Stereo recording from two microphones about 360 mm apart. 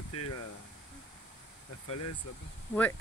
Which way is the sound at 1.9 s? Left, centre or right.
Left.